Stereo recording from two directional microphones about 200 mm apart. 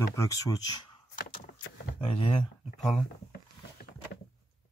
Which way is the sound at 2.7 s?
Centre (ahead or behind).